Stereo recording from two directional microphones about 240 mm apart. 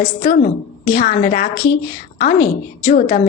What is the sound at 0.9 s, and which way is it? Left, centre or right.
Speech, left.